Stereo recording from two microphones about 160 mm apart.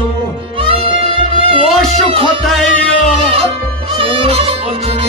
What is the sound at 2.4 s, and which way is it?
Music, centre (ahead or behind).